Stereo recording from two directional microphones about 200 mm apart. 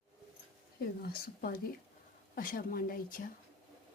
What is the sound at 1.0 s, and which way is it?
Speech, 50° left (ahead or behind).